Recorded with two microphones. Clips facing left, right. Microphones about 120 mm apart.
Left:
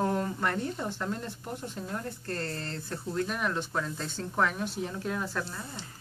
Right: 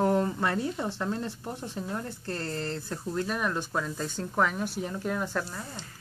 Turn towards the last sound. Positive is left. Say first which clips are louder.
# right 2 dB
turn(degrees=-5)  # may be behind; listen again after turning